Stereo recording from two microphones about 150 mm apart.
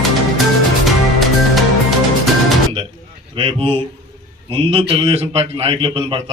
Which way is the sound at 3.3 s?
35° right (ahead or behind).